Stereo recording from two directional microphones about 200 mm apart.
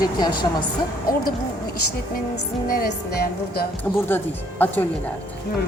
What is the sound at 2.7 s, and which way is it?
Music, 50° left (ahead or behind).